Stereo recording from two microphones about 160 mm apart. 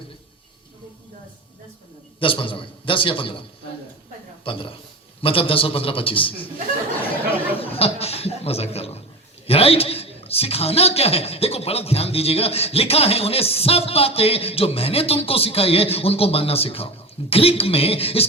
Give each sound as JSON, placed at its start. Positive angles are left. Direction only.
{"t": 2.1, "sound": "a man's voice", "side_deg": 35}
{"t": 4.4, "sound": "a man's voice", "side_deg": 35}
{"t": 7.6, "sound": "chuckle", "side_deg": 35}
{"t": 9.5, "sound": "a man's voice", "side_deg": 40}